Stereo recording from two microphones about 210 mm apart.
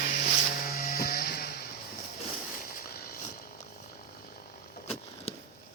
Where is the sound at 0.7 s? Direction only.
45° left (ahead or behind).